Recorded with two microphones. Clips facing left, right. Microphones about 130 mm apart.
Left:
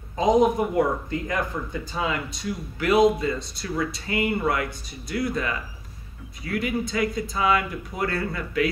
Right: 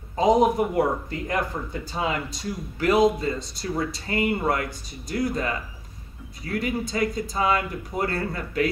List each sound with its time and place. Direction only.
0.2 s speech: 35° right (ahead or behind)